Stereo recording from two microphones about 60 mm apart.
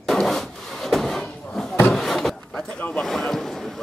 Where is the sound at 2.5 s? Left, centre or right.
Centre.